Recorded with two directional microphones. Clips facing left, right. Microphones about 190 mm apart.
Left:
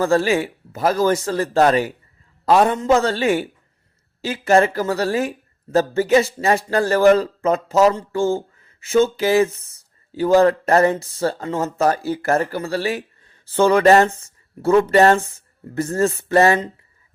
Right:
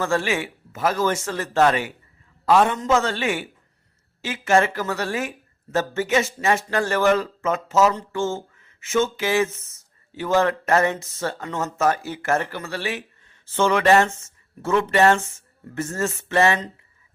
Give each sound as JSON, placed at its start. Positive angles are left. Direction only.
{"t": 0.0, "sound": "speech", "side_deg": 35}